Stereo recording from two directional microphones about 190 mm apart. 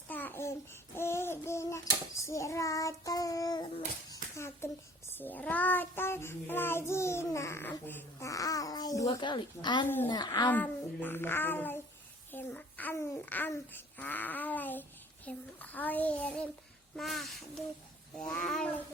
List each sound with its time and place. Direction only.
0.1 s babbling: 10° left (ahead or behind)
5.1 s child singing: 10° left (ahead or behind)
10.1 s speech: 20° left (ahead or behind)
10.5 s a child's voice: 10° left (ahead or behind)